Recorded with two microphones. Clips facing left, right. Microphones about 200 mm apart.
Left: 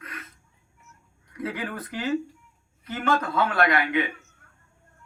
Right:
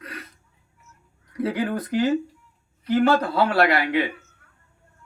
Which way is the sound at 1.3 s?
35° right (ahead or behind).